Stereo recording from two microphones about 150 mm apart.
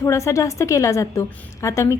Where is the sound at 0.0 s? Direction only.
20° left (ahead or behind).